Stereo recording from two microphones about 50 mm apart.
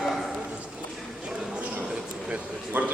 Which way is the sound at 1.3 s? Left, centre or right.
Centre.